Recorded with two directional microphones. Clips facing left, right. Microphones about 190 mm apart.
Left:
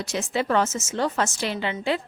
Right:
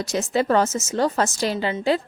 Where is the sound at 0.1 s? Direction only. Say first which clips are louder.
Right 4 dB; 40° right (ahead or behind).